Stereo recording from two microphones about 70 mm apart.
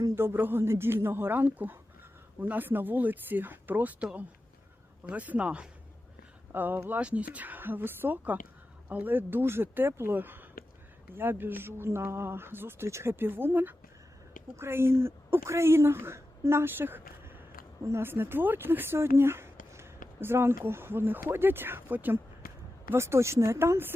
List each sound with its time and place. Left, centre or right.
0.2 s a woman's voice: right; by 5.6 s centre
6.5 s a woman's voice: right
22.9 s speech: right